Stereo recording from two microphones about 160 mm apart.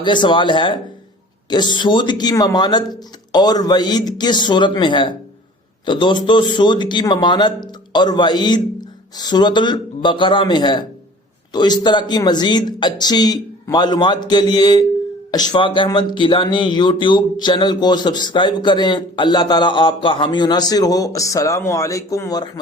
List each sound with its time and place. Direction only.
0.0 s speech: 30° left (ahead or behind)